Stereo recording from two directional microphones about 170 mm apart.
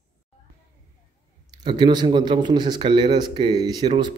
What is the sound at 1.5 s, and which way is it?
A man's voice, 25° right (ahead or behind).